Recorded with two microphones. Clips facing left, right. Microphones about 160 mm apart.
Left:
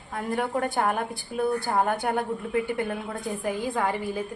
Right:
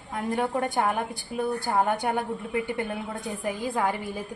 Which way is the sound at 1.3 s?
Centre (ahead or behind).